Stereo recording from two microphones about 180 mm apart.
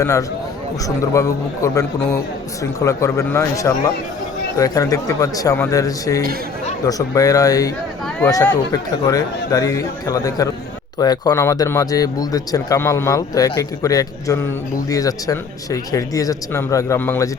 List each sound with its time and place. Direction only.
0.0 s a man's voice: 20° left (ahead or behind)